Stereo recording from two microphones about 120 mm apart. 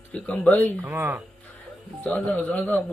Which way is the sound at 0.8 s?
15° right (ahead or behind).